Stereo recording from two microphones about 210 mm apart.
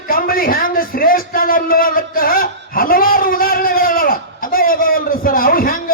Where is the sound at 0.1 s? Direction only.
45° left (ahead or behind).